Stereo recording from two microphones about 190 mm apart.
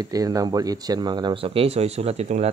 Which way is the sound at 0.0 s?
20° right (ahead or behind).